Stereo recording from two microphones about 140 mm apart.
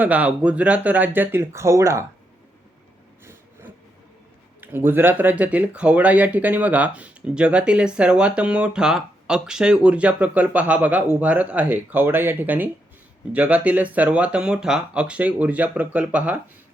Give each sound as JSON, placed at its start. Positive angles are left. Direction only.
{"t": 0.0, "sound": "speech", "side_deg": -10}
{"t": 4.6, "sound": "speech", "side_deg": -15}